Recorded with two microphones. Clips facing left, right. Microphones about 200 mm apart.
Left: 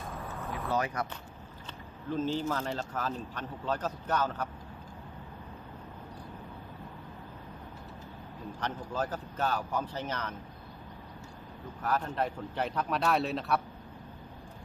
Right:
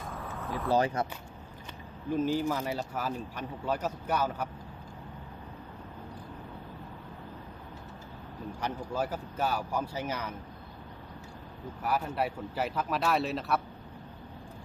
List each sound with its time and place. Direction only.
0.7 s speech: 30° right (ahead or behind)
2.0 s speech: 10° right (ahead or behind)
8.6 s speech: 10° right (ahead or behind)
11.8 s speech: 10° right (ahead or behind)